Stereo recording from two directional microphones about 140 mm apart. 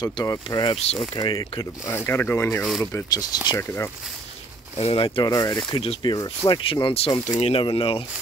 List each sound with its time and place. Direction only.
0.0 s speech: 25° left (ahead or behind)
2.0 s speech: 15° left (ahead or behind)
4.7 s speech: 45° left (ahead or behind)
5.3 s speech: 25° left (ahead or behind)
5.7 s speech: 35° left (ahead or behind)
6.6 s speech: 40° left (ahead or behind)
7.6 s speech: 40° left (ahead or behind)